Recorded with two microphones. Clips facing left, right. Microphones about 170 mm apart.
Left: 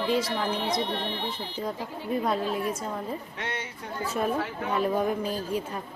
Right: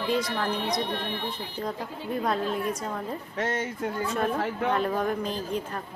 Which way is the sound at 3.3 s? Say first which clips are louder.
Right 6 dB; 45° right (ahead or behind).